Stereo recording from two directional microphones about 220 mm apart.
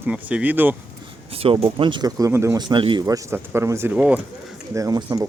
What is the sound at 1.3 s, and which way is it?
Speech, 25° right (ahead or behind).